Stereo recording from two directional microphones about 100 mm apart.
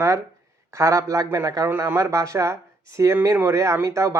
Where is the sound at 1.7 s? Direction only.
25° right (ahead or behind).